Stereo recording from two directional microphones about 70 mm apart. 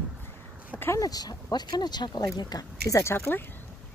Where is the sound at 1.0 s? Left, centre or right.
Left.